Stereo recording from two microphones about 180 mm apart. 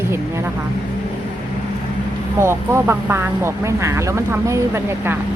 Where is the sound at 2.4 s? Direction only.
15° right (ahead or behind).